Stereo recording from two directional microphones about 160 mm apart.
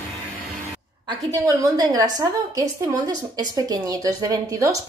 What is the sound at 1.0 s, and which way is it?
A woman's voice, 20° right (ahead or behind).